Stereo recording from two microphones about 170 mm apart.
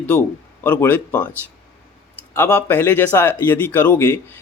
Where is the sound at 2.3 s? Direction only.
10° left (ahead or behind).